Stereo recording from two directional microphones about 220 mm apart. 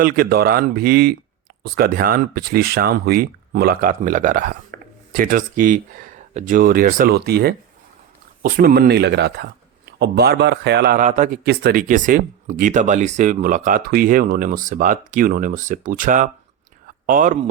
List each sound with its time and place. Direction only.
0.0 s a man's voice: 45° right (ahead or behind)
11.4 s speech: 45° right (ahead or behind)